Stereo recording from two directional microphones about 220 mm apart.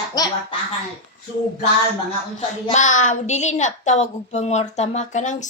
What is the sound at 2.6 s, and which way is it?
A woman's voice, 35° left (ahead or behind).